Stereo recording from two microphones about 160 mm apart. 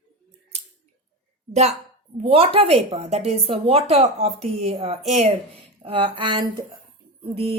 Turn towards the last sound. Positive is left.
turn(degrees=-40)  # may be behind; listen again after turning